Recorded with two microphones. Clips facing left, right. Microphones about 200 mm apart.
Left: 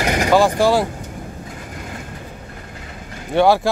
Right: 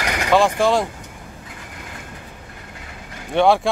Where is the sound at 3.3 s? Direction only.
Centre (ahead or behind).